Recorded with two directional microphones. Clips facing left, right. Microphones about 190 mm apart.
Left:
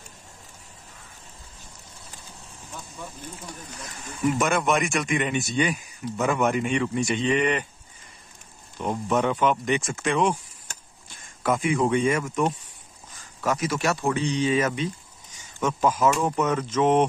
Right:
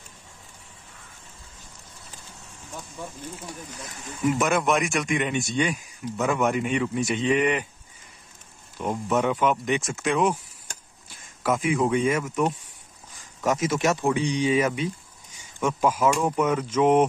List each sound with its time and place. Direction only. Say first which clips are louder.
4.4 s speech: even; centre (ahead or behind)
8.7 s speech: even; 5° right (ahead or behind)
10.7 s a sound: even; 5° right (ahead or behind)
13.4 s speech: right 2 dB; 25° right (ahead or behind)